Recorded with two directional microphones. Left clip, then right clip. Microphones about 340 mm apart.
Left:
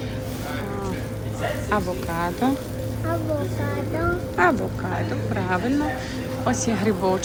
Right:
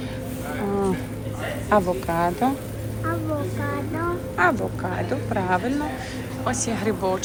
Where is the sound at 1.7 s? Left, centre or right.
Centre.